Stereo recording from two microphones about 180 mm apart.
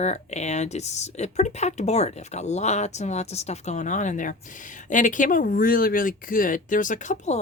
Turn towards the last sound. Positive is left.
turn(degrees=40)  # may be behind; listen again after turning